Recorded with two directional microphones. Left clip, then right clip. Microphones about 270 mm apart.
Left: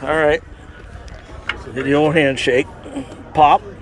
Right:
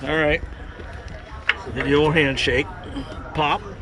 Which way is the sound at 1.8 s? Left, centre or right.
Centre.